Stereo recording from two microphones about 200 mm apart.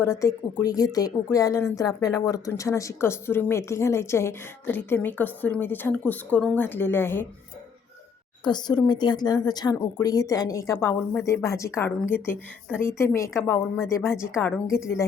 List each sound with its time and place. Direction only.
0.0 s speech: 15° left (ahead or behind)
8.4 s a woman's voice: 20° left (ahead or behind)